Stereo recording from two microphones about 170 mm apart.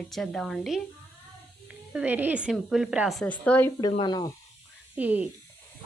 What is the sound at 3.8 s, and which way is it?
Speech, 25° left (ahead or behind).